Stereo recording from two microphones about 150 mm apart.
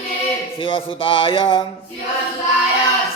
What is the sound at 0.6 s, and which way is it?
Speech, 35° left (ahead or behind).